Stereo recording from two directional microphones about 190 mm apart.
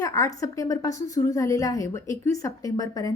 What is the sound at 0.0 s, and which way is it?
A woman's voice, 15° left (ahead or behind).